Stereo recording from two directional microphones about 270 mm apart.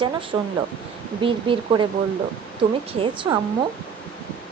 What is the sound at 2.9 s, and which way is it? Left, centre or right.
Speech, centre.